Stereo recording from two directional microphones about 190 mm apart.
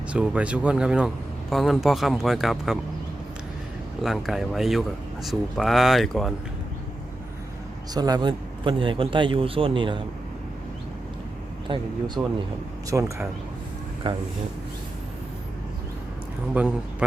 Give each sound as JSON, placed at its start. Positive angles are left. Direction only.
{"t": 0.1, "sound": "speech", "side_deg": -5}
{"t": 4.0, "sound": "speech", "side_deg": 0}
{"t": 7.9, "sound": "a man's voice", "side_deg": -20}
{"t": 11.7, "sound": "a man's voice", "side_deg": -25}
{"t": 14.0, "sound": "a man's voice", "side_deg": -30}
{"t": 16.6, "sound": "speech", "side_deg": -5}